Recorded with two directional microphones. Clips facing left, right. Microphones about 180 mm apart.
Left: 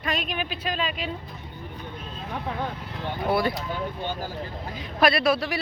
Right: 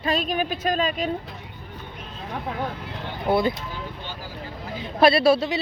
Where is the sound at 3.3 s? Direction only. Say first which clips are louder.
Right 3 dB; 20° right (ahead or behind).